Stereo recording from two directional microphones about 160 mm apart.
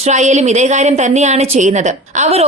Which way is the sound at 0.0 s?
45° right (ahead or behind).